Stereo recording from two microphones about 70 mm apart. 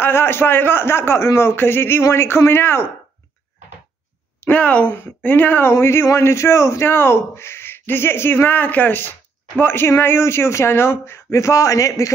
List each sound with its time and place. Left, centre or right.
0.0 s speech: left
4.4 s speech: left